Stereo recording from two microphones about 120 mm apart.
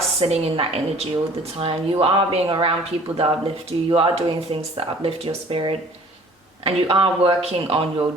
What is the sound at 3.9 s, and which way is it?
Speech, 50° right (ahead or behind).